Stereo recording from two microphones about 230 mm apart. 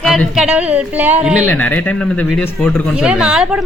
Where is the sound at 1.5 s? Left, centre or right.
Centre.